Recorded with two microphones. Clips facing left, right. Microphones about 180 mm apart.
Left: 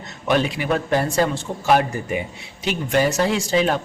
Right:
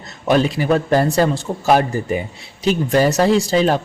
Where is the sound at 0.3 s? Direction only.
35° right (ahead or behind).